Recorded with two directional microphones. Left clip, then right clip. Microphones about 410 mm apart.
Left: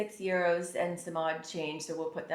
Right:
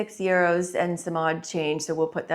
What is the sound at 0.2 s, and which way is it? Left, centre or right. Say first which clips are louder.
Speech: right 8 dB; right.